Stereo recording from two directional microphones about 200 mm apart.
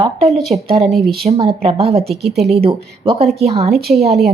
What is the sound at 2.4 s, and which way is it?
Speech, centre (ahead or behind).